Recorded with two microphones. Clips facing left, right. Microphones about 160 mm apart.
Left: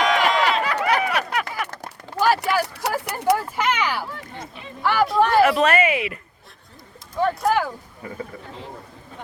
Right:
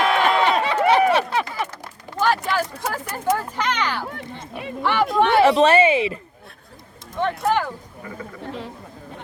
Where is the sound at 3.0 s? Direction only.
70° left (ahead or behind).